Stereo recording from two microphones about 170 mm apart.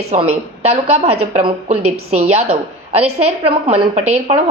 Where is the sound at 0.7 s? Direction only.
35° right (ahead or behind).